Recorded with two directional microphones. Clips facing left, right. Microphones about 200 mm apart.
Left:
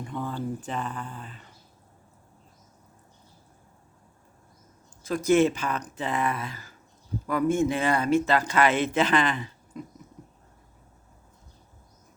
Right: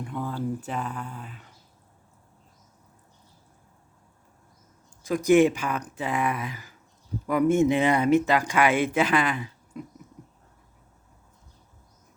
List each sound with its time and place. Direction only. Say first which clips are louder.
0.0 s speech: right 1 dB; 5° right (ahead or behind)
5.0 s speech: right 2 dB; 15° right (ahead or behind)